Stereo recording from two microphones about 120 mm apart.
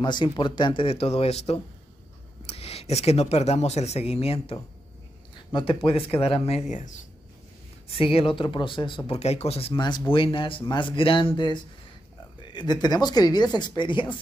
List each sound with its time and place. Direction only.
0.0 s speech: 40° left (ahead or behind)
5.3 s speech: 40° left (ahead or behind); by 6.9 s 80° left
7.9 s speech: 50° left (ahead or behind)
9.1 s speech: 60° left (ahead or behind)
9.8 s speech: 40° left (ahead or behind)